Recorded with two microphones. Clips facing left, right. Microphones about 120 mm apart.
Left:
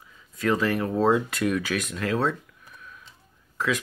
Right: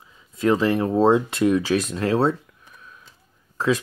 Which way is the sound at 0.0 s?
25° right (ahead or behind).